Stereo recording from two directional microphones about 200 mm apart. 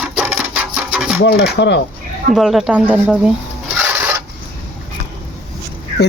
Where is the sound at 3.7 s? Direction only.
10° right (ahead or behind).